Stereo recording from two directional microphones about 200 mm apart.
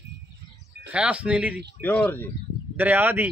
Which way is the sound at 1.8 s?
10° left (ahead or behind).